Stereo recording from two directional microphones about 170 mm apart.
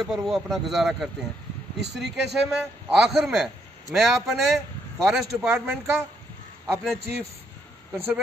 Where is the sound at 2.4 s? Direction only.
5° right (ahead or behind).